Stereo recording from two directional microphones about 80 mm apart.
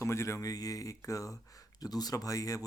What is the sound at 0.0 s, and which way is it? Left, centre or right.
Speech, left.